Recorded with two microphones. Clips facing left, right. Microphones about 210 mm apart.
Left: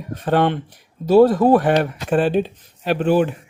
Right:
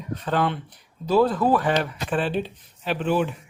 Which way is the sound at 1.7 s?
50° left (ahead or behind).